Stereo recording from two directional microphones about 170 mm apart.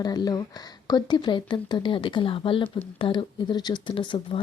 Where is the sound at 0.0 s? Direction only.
25° left (ahead or behind).